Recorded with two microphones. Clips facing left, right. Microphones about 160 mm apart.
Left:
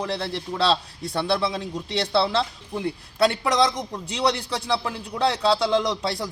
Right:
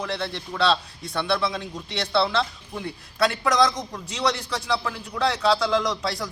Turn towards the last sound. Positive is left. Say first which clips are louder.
# left 1 dB
turn(degrees=30)  # may be behind; listen again after turning